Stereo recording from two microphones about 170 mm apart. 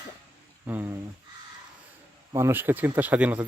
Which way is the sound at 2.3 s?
15° right (ahead or behind).